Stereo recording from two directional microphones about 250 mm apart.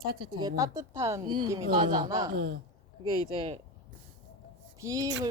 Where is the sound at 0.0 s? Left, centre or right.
Right.